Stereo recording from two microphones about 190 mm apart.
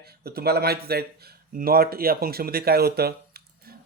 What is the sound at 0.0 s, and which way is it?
Speech, 55° right (ahead or behind).